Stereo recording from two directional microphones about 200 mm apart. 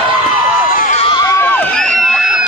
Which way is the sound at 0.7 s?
40° left (ahead or behind).